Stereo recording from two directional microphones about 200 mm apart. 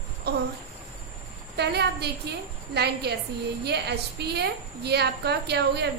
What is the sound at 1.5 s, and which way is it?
A woman's voice, 55° right (ahead or behind).